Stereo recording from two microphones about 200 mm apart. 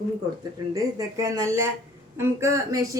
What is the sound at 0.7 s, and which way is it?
Speech, 15° right (ahead or behind).